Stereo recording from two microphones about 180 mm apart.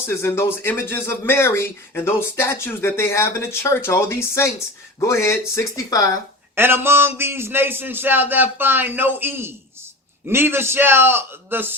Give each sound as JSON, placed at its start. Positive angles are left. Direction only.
{"t": 0.0, "sound": "speech", "side_deg": 15}
{"t": 6.6, "sound": "a man's voice", "side_deg": -10}